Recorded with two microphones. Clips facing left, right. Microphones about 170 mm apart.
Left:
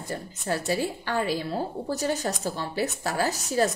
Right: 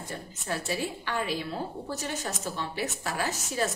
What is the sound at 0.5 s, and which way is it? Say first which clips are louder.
A woman's voice: left 5 dB; 40° left (ahead or behind).